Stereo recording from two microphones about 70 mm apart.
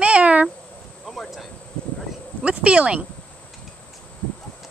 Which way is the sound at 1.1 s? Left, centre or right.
Centre.